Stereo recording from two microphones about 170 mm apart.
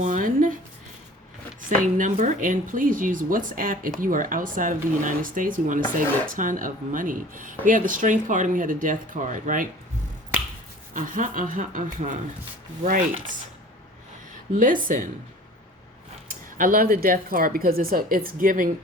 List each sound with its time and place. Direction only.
0.0 s a sound: 50° right (ahead or behind)
2.0 s speech: 45° right (ahead or behind)
10.9 s speech: 50° right (ahead or behind)
14.5 s speech: 50° right (ahead or behind)
16.3 s speech: 55° right (ahead or behind)